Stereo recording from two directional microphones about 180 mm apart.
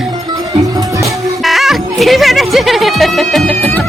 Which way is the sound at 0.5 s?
20° right (ahead or behind).